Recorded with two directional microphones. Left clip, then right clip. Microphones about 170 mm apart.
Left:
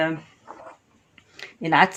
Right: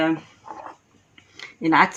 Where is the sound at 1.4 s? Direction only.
40° left (ahead or behind).